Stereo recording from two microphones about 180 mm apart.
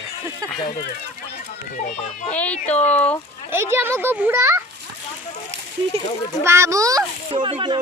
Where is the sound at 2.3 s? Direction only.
10° left (ahead or behind).